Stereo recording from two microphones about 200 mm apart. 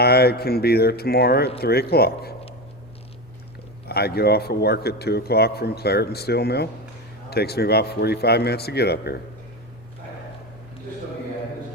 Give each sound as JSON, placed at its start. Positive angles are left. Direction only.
{"t": 0.0, "sound": "a man's voice", "side_deg": 50}
{"t": 3.8, "sound": "a man's voice", "side_deg": 50}